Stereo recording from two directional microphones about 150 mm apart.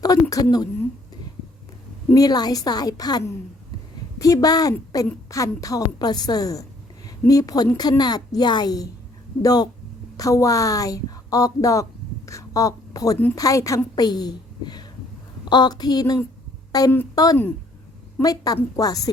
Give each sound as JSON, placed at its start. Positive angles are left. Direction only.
{"t": 0.0, "sound": "a woman's voice", "side_deg": 25}
{"t": 2.1, "sound": "a woman's voice", "side_deg": 25}